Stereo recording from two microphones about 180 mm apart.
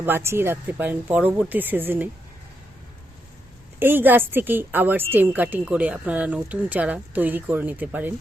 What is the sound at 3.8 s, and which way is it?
A woman's voice, 10° right (ahead or behind).